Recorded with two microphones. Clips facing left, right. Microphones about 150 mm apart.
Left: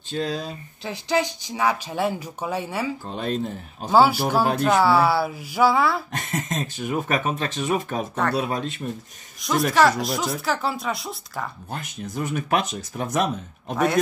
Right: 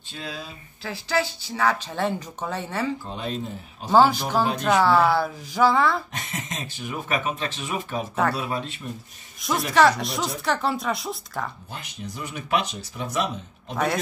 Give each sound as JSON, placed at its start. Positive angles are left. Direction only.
{"t": 0.1, "sound": "speech", "side_deg": 40}
{"t": 0.8, "sound": "speech", "side_deg": 20}
{"t": 3.9, "sound": "speech", "side_deg": 10}
{"t": 6.1, "sound": "speech", "side_deg": 45}
{"t": 9.4, "sound": "speech", "side_deg": 0}
{"t": 11.7, "sound": "speech", "side_deg": 50}